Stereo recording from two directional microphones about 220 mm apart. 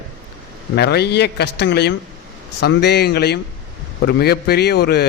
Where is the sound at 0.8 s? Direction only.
50° left (ahead or behind).